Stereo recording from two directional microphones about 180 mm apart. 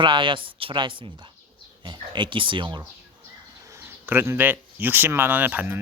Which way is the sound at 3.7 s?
10° right (ahead or behind).